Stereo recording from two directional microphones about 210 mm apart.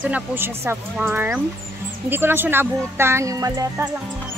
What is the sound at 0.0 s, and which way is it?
Speech, 10° right (ahead or behind).